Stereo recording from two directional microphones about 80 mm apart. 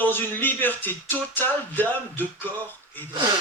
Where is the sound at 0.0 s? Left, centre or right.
Left.